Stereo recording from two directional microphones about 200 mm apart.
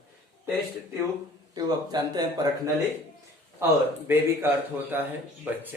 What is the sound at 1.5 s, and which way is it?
Speech, 20° right (ahead or behind).